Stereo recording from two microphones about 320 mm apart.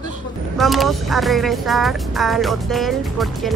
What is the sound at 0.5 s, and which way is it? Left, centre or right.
Speech, centre.